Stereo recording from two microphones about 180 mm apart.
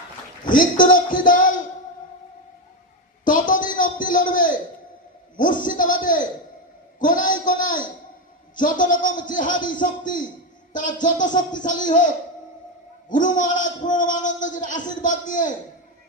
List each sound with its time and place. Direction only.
0.4 s a man's voice: 50° left (ahead or behind)
3.2 s a man's voice: 50° left (ahead or behind)